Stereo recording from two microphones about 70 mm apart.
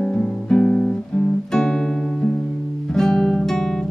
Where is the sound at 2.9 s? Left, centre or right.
Centre.